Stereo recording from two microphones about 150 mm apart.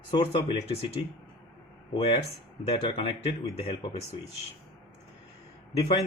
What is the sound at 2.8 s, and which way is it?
A man's voice, 40° left (ahead or behind).